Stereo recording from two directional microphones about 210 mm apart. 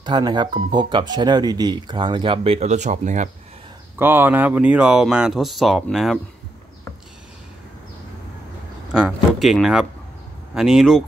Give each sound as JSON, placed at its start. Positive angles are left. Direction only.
{"t": 0.0, "sound": "speech", "side_deg": -20}
{"t": 4.0, "sound": "speech", "side_deg": -10}
{"t": 8.9, "sound": "speech", "side_deg": 0}